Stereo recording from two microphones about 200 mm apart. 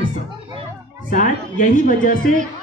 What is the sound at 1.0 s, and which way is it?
Speech, 40° left (ahead or behind).